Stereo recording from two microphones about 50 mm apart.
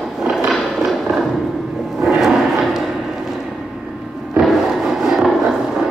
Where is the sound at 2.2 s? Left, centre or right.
Centre.